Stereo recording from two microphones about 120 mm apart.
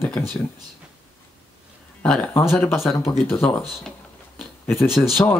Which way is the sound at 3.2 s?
20° left (ahead or behind).